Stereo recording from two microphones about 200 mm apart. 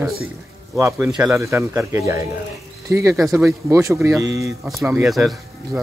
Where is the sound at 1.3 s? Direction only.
15° right (ahead or behind).